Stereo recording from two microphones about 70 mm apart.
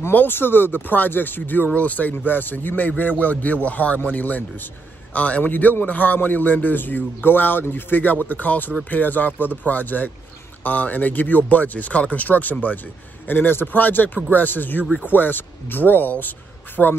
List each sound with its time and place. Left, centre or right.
0.1 s speech: left